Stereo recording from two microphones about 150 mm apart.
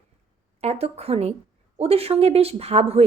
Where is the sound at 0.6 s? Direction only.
45° right (ahead or behind).